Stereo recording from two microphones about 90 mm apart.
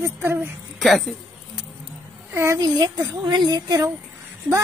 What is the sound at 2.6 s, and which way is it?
A woman's voice, 50° right (ahead or behind).